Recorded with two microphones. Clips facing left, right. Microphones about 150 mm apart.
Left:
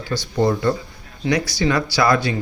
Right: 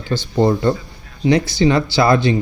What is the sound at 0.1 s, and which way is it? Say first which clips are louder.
Speech: right 3 dB; 30° right (ahead or behind).